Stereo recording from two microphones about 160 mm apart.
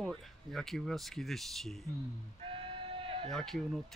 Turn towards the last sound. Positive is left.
turn(degrees=0)  # may be behind; listen again after turning